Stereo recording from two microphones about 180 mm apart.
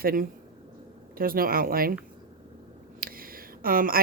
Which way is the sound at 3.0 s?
55° right (ahead or behind).